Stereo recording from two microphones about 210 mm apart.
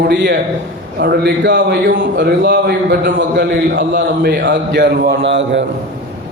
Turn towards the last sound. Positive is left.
turn(degrees=-60)  # may be behind; listen again after turning